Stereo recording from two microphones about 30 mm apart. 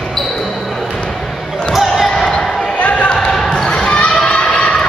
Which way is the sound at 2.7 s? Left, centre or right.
Left.